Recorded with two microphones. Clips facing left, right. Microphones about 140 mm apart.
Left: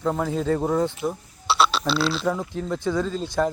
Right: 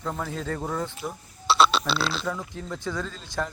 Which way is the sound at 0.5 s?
40° left (ahead or behind).